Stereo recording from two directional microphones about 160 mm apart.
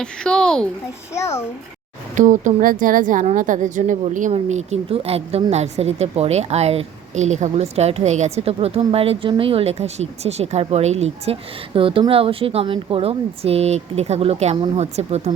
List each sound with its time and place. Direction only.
0.0 s a child's voice: 5° left (ahead or behind)
1.1 s a child's voice: 15° left (ahead or behind)
2.1 s a woman's voice: 50° right (ahead or behind)